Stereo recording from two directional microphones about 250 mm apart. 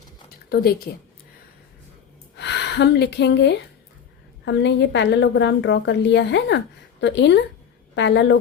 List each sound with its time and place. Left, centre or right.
0.5 s speech: left
2.3 s a woman's voice: left